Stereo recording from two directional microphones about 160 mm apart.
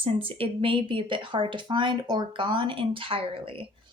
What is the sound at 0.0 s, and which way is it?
A woman's voice, 35° right (ahead or behind).